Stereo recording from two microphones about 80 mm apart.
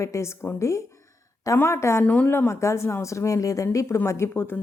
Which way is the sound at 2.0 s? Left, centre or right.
Centre.